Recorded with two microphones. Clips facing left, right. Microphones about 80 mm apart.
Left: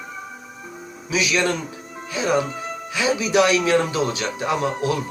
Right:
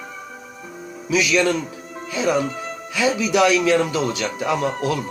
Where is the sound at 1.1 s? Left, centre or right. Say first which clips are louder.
Right 3 dB; centre.